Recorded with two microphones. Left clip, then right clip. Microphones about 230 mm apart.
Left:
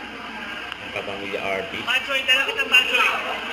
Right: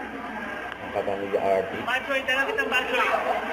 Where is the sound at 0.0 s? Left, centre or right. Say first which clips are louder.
Left 1 dB; centre.